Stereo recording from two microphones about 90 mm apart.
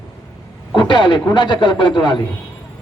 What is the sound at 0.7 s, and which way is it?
A man's voice, 60° left (ahead or behind).